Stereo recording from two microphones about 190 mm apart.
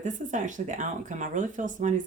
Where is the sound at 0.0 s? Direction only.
40° right (ahead or behind).